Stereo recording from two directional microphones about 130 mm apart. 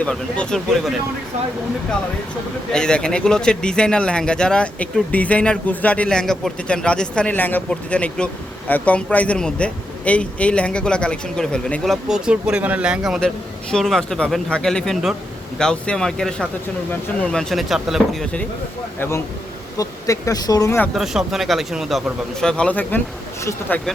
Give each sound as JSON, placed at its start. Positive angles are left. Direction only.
{"t": 0.0, "sound": "speech", "side_deg": 5}
{"t": 2.7, "sound": "speech", "side_deg": 5}
{"t": 18.9, "sound": "speech", "side_deg": 20}
{"t": 20.7, "sound": "speech", "side_deg": 15}
{"t": 20.9, "sound": "speech", "side_deg": -5}